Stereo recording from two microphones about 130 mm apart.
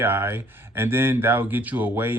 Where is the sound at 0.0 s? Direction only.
15° right (ahead or behind).